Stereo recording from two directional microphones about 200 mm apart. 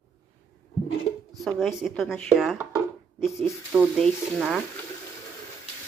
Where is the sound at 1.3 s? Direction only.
Centre (ahead or behind).